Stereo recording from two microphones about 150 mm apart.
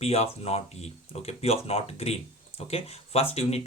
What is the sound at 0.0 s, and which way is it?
Speech, 45° left (ahead or behind).